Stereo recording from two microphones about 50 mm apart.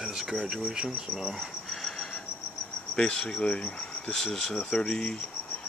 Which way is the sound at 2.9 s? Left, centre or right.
Centre.